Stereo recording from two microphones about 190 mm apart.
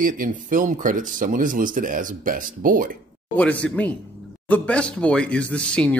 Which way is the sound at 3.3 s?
5° left (ahead or behind).